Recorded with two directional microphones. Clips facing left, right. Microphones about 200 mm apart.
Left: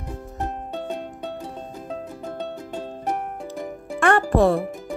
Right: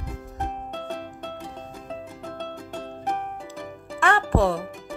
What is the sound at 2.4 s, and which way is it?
Music, 5° left (ahead or behind).